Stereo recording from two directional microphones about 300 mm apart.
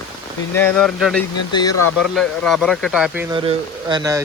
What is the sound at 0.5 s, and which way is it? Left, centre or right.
Speech, centre.